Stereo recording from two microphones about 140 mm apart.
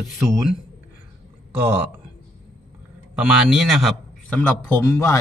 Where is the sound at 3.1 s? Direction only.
5° right (ahead or behind).